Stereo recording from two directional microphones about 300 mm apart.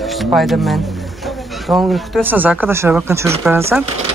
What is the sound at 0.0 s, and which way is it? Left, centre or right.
Speech, centre.